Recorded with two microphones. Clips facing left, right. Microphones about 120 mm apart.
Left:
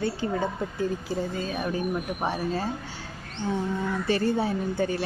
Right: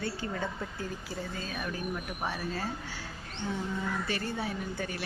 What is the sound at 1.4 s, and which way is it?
Speech, 35° left (ahead or behind).